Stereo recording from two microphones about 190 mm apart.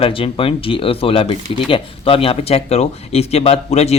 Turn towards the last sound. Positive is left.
turn(degrees=35)  # may be behind; listen again after turning